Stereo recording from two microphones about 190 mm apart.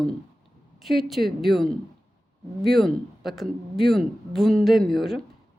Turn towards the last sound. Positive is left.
turn(degrees=0)  # may be behind; listen again after turning